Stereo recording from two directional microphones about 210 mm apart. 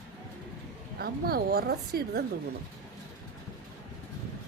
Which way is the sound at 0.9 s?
45° right (ahead or behind).